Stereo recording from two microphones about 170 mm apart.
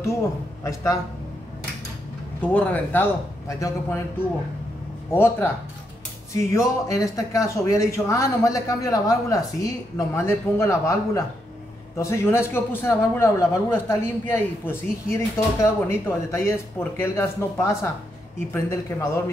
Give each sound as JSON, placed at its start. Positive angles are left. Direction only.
{"t": 2.4, "sound": "speech", "side_deg": 10}
{"t": 5.1, "sound": "speech", "side_deg": 15}